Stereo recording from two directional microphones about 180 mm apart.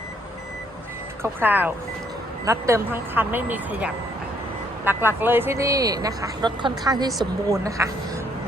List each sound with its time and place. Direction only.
1.2 s speech: 10° right (ahead or behind)